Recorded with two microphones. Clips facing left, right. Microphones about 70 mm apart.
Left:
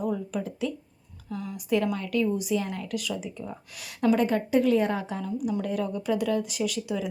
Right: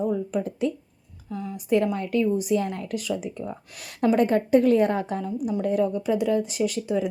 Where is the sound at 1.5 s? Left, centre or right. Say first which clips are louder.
Right 4 dB; right.